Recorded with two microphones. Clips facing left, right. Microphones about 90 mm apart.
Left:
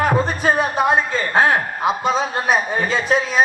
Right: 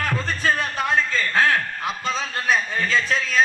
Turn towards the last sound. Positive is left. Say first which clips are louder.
# left 4 dB
turn(degrees=15)  # may be behind; listen again after turning